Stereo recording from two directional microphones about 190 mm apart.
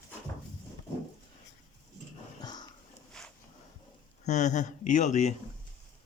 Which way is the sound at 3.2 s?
Centre (ahead or behind).